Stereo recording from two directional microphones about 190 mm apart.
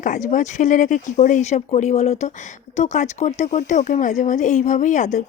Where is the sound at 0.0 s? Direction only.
40° left (ahead or behind).